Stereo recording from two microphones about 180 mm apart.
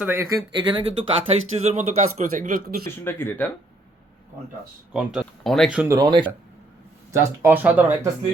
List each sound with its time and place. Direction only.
0.0 s speech: 15° right (ahead or behind); by 2.8 s 55° right (ahead or behind)
2.8 s speech: 10° left (ahead or behind)
5.2 s speech: centre (ahead or behind)
5.8 s speech: 20° right (ahead or behind)
7.1 s speech: 15° right (ahead or behind)